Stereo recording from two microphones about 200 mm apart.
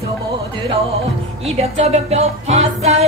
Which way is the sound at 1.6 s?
30° right (ahead or behind).